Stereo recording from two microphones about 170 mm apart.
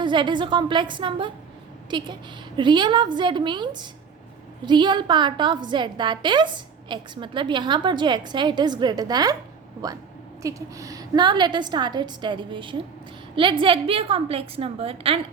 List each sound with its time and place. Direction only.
0.0 s a woman's voice: 30° right (ahead or behind)
10.4 s a woman's voice: 20° right (ahead or behind)